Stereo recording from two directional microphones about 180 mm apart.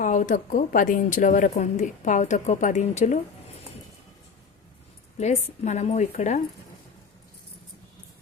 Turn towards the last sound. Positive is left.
turn(degrees=40)  # may be behind; listen again after turning